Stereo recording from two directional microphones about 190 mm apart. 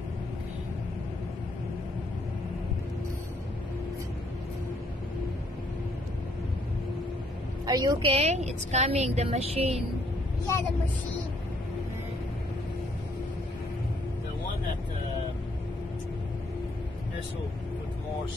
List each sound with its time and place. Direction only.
7.6 s a woman's voice: 20° right (ahead or behind)